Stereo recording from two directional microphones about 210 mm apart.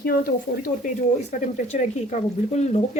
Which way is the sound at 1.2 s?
30° left (ahead or behind).